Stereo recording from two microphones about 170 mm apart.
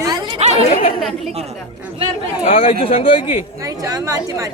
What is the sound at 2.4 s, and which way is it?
Speech, 35° left (ahead or behind).